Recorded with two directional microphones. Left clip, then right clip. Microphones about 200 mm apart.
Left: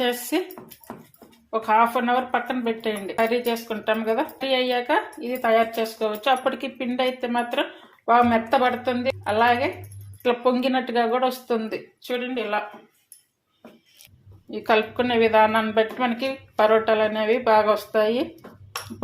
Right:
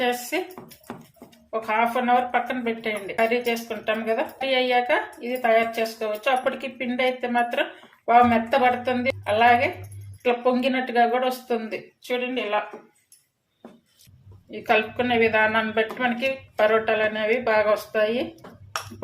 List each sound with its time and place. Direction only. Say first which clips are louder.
0.1 s speech: left 1 dB; 30° left (ahead or behind)
1.5 s speech: left 4 dB; 25° left (ahead or behind)
10.2 s speech: even; 20° left (ahead or behind)
14.5 s speech: left 1 dB; 25° left (ahead or behind)